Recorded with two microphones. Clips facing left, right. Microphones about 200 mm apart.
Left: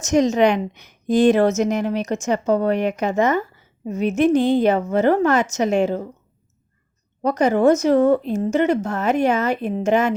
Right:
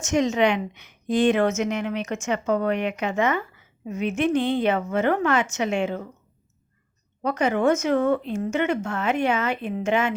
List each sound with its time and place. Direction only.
0.0 s a woman's voice: 40° left (ahead or behind)
7.2 s a woman's voice: 40° left (ahead or behind)